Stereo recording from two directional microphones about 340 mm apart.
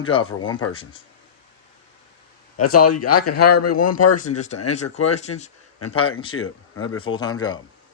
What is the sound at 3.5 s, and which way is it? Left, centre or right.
Speech, left.